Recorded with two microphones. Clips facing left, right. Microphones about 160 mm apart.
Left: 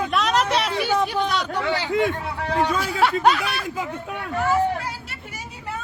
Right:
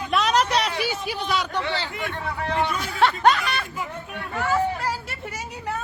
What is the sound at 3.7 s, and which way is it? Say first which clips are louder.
Speech: left 4 dB; 90° left.